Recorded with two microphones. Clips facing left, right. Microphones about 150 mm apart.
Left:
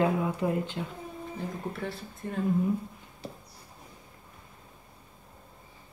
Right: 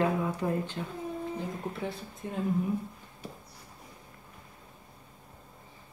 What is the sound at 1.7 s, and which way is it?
Speech, 15° right (ahead or behind).